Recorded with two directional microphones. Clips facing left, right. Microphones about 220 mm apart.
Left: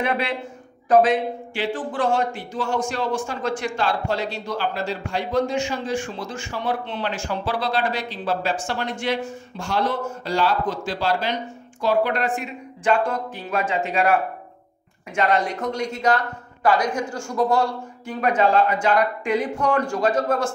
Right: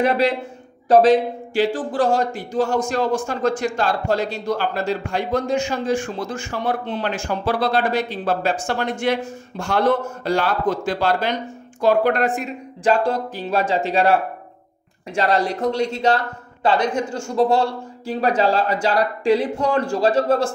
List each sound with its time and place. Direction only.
0.0 s a man's voice: 40° right (ahead or behind)